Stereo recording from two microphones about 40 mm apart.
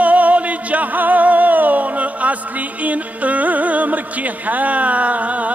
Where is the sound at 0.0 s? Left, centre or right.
Right.